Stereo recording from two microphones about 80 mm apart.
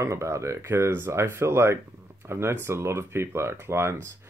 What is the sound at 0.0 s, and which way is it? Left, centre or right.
Speech, right.